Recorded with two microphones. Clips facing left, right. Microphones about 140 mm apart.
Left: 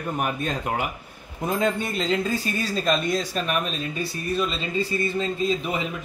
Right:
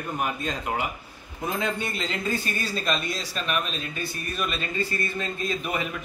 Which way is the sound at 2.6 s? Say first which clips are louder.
Left 4 dB; 40° left (ahead or behind).